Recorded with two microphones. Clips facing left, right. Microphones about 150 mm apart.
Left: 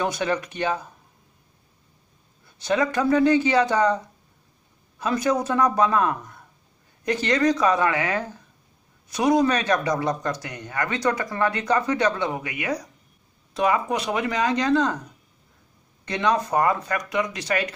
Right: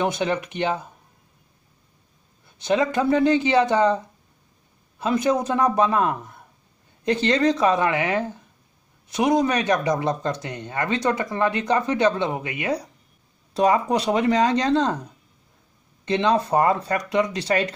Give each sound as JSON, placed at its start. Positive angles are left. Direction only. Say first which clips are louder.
{"t": 0.0, "sound": "speech", "louder": "right 1 dB", "side_deg": -20}
{"t": 2.6, "sound": "speech", "louder": "right 1 dB", "side_deg": -20}
{"t": 16.1, "sound": "speech", "louder": "right 3 dB", "side_deg": -25}